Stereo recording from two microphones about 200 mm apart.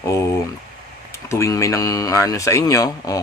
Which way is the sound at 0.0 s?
15° left (ahead or behind).